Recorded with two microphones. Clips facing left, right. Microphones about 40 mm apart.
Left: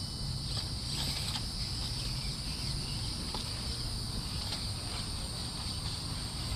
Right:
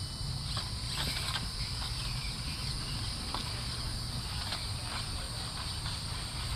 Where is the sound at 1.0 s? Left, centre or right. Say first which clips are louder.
Right 3 dB; right.